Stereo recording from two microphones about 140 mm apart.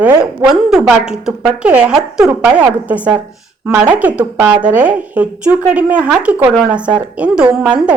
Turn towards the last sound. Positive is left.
turn(degrees=-10)  # may be behind; listen again after turning